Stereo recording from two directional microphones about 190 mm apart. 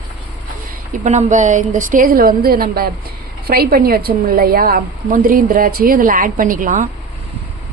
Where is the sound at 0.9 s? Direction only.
40° right (ahead or behind).